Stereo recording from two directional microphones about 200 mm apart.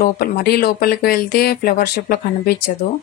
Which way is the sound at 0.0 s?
50° left (ahead or behind).